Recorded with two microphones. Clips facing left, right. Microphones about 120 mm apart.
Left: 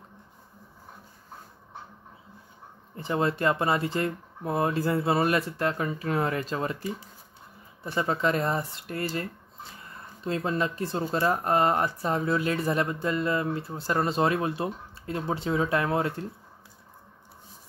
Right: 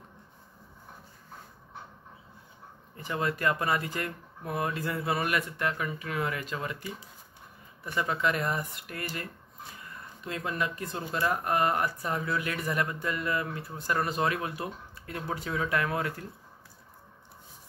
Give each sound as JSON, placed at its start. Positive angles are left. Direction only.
{"t": 3.0, "sound": "speech", "side_deg": 30}